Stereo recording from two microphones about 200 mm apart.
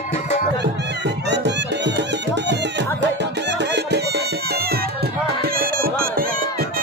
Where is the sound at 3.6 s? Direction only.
60° right (ahead or behind).